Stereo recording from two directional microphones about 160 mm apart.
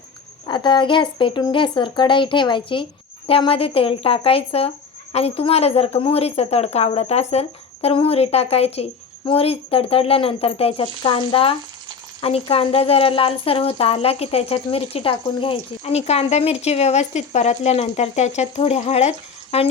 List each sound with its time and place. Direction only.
0.4 s a woman's voice: 30° left (ahead or behind)